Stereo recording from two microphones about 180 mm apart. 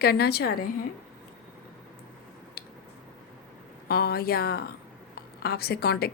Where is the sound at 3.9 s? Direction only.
60° left (ahead or behind).